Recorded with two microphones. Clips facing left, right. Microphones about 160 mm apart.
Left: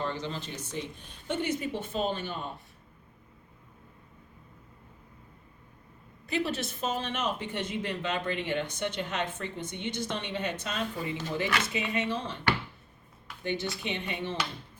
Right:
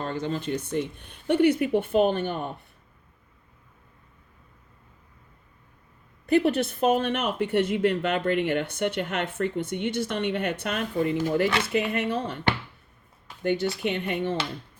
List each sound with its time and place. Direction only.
0.0 s speech: 50° right (ahead or behind)
6.2 s speech: 55° right (ahead or behind)
13.4 s speech: 50° right (ahead or behind)